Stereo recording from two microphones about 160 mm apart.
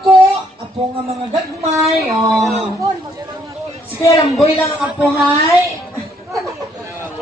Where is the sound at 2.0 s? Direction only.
Centre (ahead or behind).